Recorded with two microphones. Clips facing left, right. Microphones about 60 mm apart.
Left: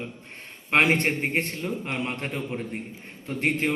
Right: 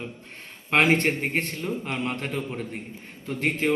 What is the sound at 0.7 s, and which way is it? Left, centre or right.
A man's voice, left.